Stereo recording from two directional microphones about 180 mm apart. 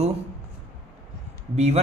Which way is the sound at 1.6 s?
35° right (ahead or behind).